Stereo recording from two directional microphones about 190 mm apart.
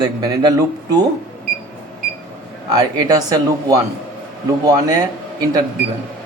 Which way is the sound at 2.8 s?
20° right (ahead or behind).